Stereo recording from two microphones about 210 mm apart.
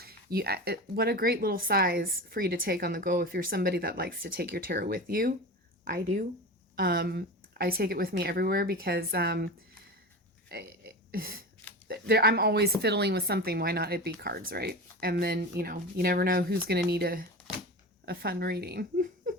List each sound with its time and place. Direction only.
0.0 s speech: 50° right (ahead or behind)
10.5 s burping: 45° right (ahead or behind)
11.9 s a woman's voice: 50° right (ahead or behind)